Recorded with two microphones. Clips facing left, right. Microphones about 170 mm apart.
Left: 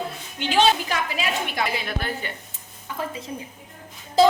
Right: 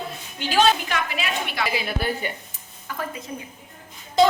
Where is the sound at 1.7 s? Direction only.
10° right (ahead or behind).